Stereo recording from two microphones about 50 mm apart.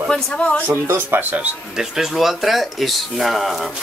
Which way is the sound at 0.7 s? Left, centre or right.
Right.